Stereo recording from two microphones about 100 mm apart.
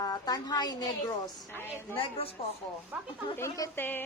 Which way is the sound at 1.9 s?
65° left (ahead or behind).